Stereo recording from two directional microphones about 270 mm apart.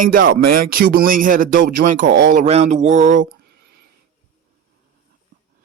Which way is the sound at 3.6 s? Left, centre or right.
Right.